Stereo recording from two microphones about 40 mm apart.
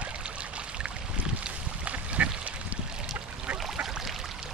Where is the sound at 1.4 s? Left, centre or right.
Right.